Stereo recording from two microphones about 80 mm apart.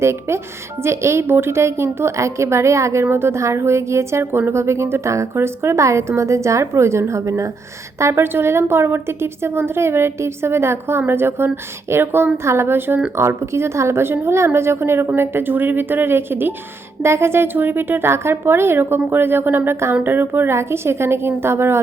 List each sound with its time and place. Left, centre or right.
0.0 s a woman's voice: right